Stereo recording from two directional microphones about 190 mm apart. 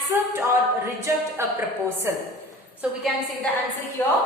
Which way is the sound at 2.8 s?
5° right (ahead or behind).